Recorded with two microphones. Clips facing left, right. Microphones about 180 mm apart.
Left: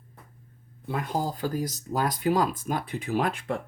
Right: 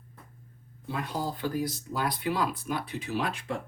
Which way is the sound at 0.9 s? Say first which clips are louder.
Left 3 dB; 50° left (ahead or behind).